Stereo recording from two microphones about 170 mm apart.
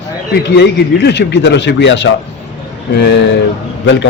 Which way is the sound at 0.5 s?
85° left.